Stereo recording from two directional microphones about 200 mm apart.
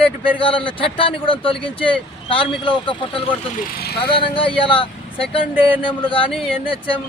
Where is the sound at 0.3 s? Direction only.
25° left (ahead or behind).